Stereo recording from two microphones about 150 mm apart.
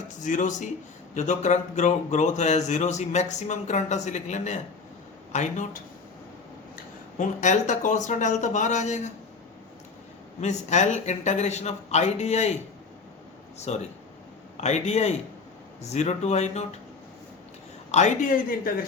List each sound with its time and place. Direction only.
0.2 s speech: 55° left (ahead or behind)
7.2 s speech: 55° left (ahead or behind)
10.4 s speech: 50° left (ahead or behind)
13.7 s speech: 45° left (ahead or behind)
17.9 s speech: 55° left (ahead or behind)